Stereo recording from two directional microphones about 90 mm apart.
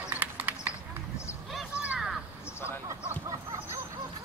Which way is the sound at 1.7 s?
10° right (ahead or behind).